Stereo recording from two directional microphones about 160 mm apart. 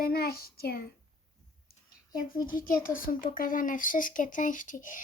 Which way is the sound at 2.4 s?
55° left (ahead or behind).